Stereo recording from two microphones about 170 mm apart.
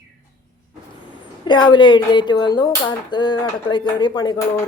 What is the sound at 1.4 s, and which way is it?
Speech, 25° left (ahead or behind).